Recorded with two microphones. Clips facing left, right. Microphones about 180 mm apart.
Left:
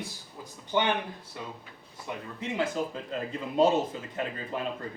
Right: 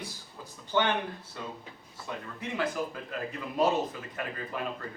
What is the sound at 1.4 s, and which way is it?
Speech, 15° left (ahead or behind).